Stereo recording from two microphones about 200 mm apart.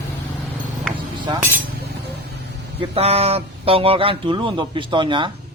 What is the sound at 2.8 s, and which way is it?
A man's voice, 30° right (ahead or behind).